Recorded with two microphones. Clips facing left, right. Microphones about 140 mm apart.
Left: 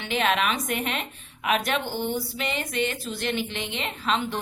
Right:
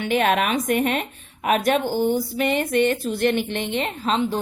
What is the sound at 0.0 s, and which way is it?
A woman's voice, 50° right (ahead or behind).